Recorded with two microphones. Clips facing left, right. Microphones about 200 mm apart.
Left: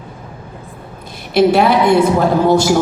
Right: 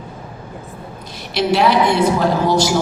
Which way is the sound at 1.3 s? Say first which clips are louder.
Left 4 dB; 55° left (ahead or behind).